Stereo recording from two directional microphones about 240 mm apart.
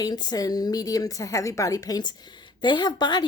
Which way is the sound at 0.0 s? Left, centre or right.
Centre.